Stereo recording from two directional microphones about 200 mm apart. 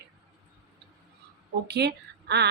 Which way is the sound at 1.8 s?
55° right (ahead or behind).